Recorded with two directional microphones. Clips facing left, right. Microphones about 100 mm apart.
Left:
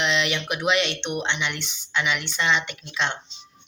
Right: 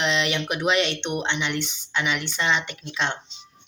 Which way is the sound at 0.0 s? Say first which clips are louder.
Even; 40° right (ahead or behind).